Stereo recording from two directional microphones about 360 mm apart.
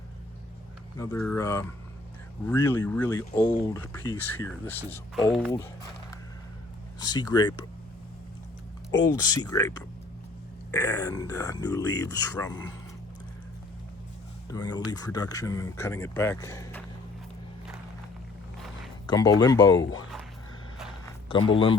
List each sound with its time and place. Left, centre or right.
0.9 s speech: centre
8.9 s speech: centre
14.5 s speech: centre
19.0 s speech: centre
19.8 s speech: left